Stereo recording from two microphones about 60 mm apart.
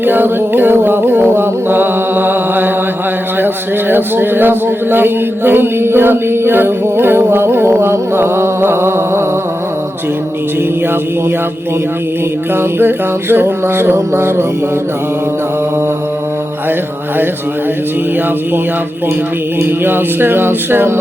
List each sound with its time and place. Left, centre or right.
0.0 s mantra: right
3.4 s a man's voice: right
12.5 s a man's voice: right
19.6 s a man's voice: right